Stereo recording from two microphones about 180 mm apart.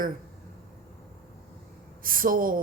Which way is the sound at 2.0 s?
50° right (ahead or behind).